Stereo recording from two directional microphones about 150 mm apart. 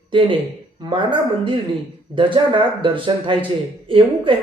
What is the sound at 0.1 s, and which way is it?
Speech, 35° right (ahead or behind).